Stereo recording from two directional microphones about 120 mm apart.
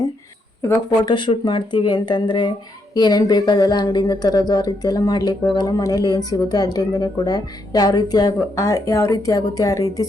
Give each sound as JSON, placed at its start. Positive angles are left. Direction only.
{"t": 1.0, "sound": "speech", "side_deg": 40}